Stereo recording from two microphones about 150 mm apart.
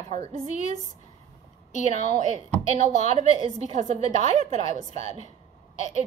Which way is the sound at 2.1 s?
55° right (ahead or behind).